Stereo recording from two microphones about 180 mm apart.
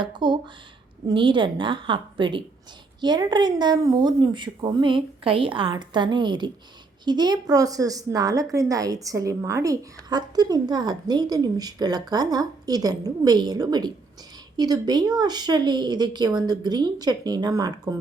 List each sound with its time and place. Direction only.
0.0 s a woman's voice: 25° right (ahead or behind)